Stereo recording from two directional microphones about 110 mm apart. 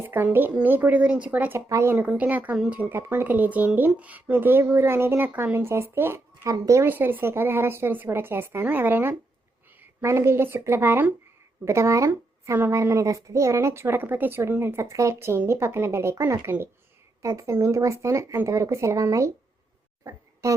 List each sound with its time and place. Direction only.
0.0 s speech: 20° right (ahead or behind)
20.4 s speech: 25° right (ahead or behind)